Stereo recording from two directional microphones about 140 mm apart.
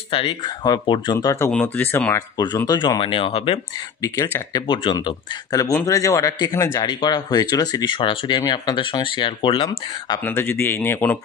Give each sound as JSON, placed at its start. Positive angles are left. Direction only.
{"t": 0.1, "sound": "speech", "side_deg": 40}
{"t": 1.5, "sound": "speech", "side_deg": 10}
{"t": 2.1, "sound": "speech", "side_deg": 30}
{"t": 4.0, "sound": "speech", "side_deg": 25}
{"t": 4.6, "sound": "speech", "side_deg": 35}
{"t": 10.2, "sound": "speech", "side_deg": 15}